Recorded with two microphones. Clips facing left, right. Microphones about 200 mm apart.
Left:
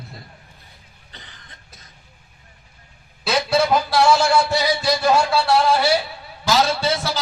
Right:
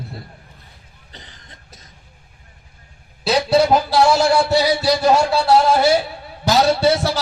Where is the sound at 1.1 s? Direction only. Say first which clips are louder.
Right 3 dB; 35° right (ahead or behind).